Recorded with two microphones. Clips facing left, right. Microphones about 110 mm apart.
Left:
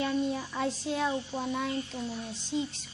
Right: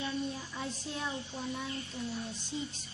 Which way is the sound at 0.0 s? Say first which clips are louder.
Left 7 dB; 80° left.